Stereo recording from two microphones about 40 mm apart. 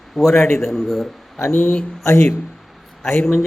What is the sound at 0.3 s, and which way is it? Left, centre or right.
Speech, left.